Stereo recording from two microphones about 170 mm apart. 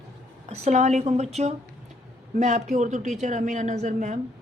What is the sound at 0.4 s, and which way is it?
A woman's voice, 40° right (ahead or behind).